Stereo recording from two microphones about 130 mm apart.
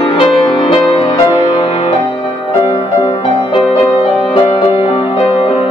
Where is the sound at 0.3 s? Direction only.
Centre (ahead or behind).